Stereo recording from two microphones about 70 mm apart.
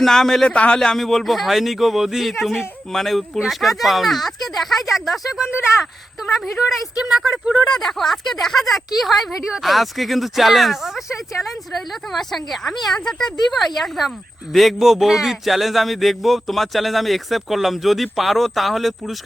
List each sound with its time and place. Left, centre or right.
0.0 s speech: centre
0.4 s a man's voice: centre
0.8 s speech: centre
7.8 s speech: centre
12.1 s speech: centre